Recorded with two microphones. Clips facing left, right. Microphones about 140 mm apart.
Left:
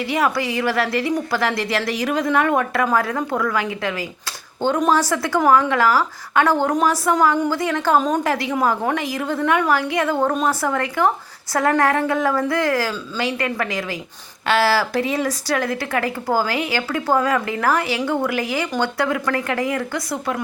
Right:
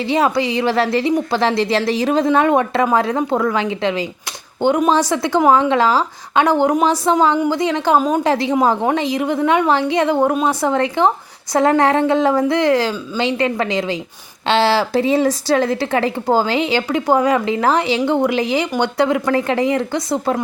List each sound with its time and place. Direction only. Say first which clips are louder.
0.0 s a woman's voice: right 4 dB; 25° right (ahead or behind)
7.9 s a woman's voice: right 2 dB; 10° right (ahead or behind)
8.2 s a woman's voice: right 5 dB; 25° right (ahead or behind)